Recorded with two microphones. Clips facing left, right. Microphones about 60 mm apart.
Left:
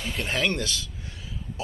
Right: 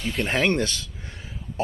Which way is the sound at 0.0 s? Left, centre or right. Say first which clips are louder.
Right 5 dB; centre.